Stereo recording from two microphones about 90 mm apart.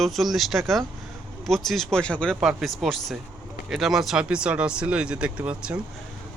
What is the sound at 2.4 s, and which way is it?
Speech, 5° right (ahead or behind).